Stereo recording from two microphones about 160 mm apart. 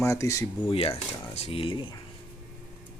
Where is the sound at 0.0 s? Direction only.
20° left (ahead or behind).